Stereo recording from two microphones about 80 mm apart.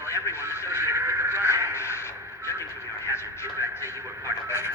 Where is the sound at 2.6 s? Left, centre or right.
Left.